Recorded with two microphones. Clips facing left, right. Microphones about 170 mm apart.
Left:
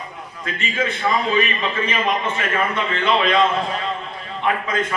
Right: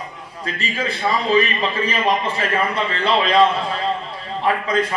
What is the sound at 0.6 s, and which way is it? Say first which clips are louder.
A man's voice: left 1 dB; 35° right (ahead or behind).